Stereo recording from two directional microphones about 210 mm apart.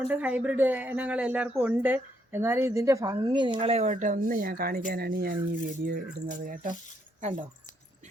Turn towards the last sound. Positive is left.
turn(degrees=-35)  # may be behind; listen again after turning